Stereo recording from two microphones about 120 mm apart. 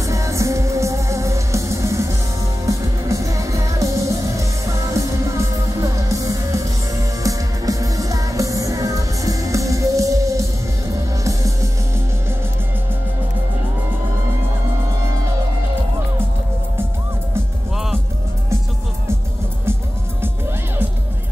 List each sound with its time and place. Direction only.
0.0 s music: 25° right (ahead or behind)